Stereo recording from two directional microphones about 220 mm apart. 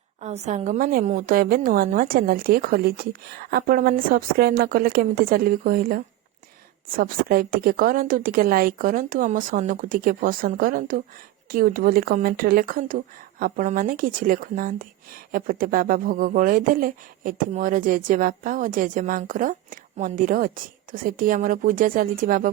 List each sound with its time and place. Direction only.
0.2 s a woman's voice: 30° right (ahead or behind)